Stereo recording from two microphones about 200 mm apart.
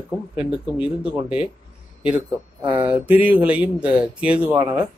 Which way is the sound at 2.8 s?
5° right (ahead or behind).